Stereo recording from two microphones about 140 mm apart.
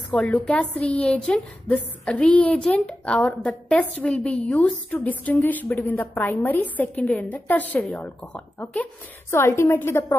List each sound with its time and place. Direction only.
0.1 s a woman's voice: 10° left (ahead or behind)